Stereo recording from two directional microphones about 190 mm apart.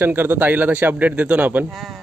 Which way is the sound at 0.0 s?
10° right (ahead or behind).